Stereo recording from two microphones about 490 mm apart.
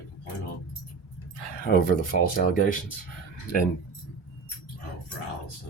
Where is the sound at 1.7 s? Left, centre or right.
Centre.